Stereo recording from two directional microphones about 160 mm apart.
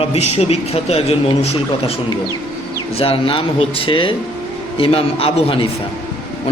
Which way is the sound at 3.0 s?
35° left (ahead or behind).